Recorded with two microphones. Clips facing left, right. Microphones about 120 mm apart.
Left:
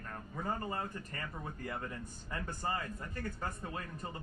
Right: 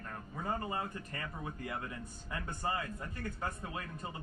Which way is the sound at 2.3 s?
15° right (ahead or behind).